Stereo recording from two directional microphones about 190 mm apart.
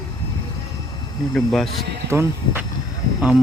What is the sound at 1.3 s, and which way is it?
Speech, 5° left (ahead or behind).